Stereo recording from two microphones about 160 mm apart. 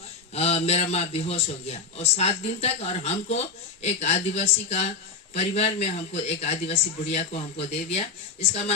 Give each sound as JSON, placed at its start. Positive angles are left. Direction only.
{"t": 0.3, "sound": "a man's voice", "side_deg": 40}